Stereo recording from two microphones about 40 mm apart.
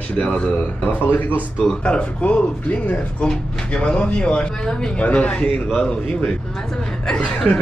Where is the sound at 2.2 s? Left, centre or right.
Left.